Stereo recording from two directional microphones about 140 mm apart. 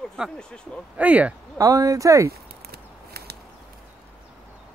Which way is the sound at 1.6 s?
25° right (ahead or behind).